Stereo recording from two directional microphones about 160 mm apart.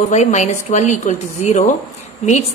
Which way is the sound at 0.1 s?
45° left (ahead or behind).